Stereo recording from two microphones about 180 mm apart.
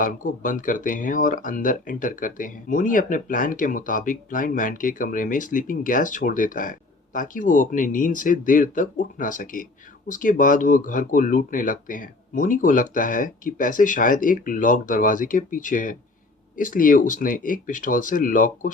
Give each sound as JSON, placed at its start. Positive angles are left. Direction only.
{"t": 0.0, "sound": "speech", "side_deg": 45}